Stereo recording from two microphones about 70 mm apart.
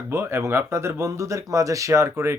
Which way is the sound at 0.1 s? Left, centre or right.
Right.